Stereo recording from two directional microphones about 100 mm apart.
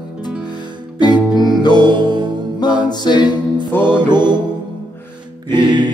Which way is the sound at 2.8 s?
45° left (ahead or behind).